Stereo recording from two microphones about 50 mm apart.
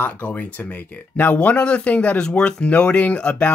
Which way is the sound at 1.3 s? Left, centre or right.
Left.